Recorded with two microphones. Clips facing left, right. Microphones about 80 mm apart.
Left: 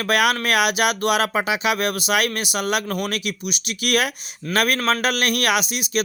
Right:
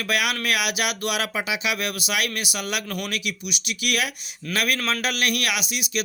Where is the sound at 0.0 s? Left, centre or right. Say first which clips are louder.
Left 5 dB; left.